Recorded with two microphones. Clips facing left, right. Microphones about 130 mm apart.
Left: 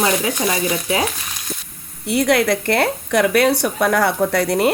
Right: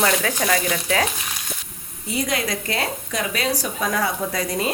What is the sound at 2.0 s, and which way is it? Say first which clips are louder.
A woman's voice: left 8 dB; 70° left (ahead or behind).